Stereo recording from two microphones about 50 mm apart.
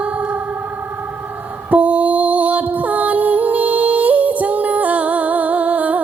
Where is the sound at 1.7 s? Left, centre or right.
Right.